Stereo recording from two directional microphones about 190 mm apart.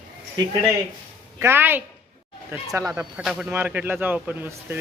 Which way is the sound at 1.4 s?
10° right (ahead or behind).